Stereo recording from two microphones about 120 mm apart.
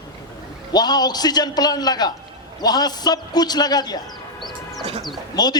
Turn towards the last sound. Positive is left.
turn(degrees=35)  # may be behind; listen again after turning